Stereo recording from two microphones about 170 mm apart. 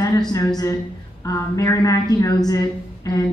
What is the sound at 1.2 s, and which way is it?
Speech, 20° left (ahead or behind).